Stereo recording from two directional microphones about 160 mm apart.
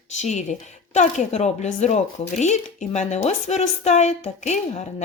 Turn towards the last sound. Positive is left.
turn(degrees=45)  # may be behind; listen again after turning